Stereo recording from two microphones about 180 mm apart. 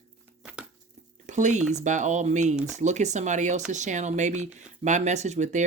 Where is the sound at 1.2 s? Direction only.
40° right (ahead or behind).